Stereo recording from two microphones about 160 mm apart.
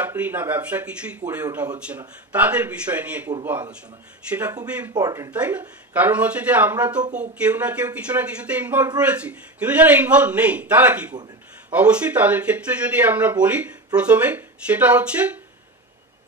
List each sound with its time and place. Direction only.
0.0 s a man's voice: 10° right (ahead or behind)
4.3 s a man's voice: 10° right (ahead or behind)
4.9 s speech: 20° right (ahead or behind)
5.3 s a man's voice: 10° right (ahead or behind)